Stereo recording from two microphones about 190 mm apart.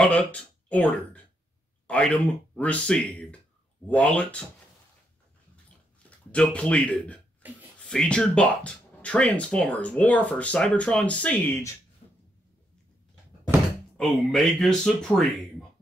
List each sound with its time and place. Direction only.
0.0 s speech: 5° left (ahead or behind)
6.0 s speech: 5° left (ahead or behind)
7.4 s speech: 10° right (ahead or behind)
7.8 s speech: 5° left (ahead or behind)
12.0 s finger snapping: 30° left (ahead or behind)
13.9 s speech: centre (ahead or behind)